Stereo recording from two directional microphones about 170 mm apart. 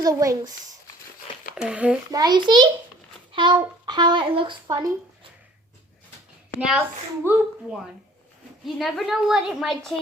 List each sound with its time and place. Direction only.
0.0 s speech: 20° right (ahead or behind)
1.5 s a woman's voice: 5° right (ahead or behind)
2.1 s a child's voice: 25° right (ahead or behind)
6.6 s a woman's voice: centre (ahead or behind)
7.3 s speech: 15° right (ahead or behind)
8.6 s a woman's voice: centre (ahead or behind)